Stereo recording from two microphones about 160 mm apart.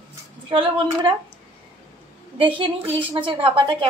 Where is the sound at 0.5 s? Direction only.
30° right (ahead or behind).